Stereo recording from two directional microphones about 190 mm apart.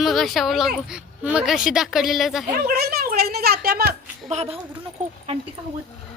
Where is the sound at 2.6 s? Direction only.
55° right (ahead or behind).